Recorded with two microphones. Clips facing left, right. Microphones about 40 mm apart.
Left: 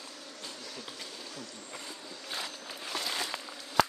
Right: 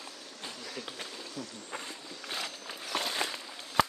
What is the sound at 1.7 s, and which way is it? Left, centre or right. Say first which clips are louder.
Vehicle: right 2 dB; right.